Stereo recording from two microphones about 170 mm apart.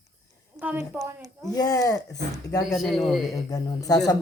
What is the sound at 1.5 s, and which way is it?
Speech, 20° left (ahead or behind).